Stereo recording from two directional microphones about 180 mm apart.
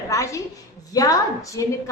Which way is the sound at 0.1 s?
15° left (ahead or behind).